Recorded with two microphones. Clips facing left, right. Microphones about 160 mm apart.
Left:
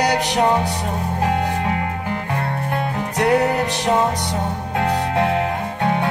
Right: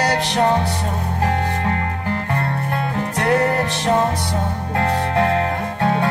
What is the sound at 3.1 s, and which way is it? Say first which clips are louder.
Music: left 1 dB; 15° left (ahead or behind).